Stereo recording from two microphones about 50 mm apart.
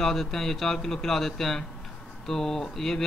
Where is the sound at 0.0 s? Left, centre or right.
Centre.